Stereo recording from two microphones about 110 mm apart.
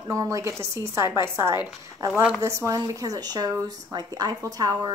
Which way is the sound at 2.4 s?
25° right (ahead or behind).